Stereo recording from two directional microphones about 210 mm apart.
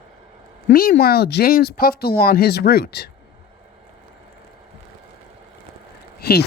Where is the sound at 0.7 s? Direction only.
45° left (ahead or behind).